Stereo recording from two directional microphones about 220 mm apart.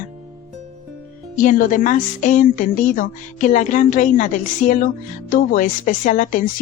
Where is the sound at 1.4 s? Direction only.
35° left (ahead or behind).